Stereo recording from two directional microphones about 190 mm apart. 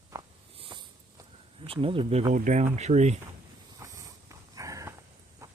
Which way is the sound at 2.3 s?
40° right (ahead or behind).